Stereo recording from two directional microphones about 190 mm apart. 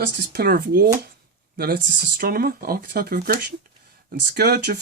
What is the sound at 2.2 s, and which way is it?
Speech, 55° right (ahead or behind).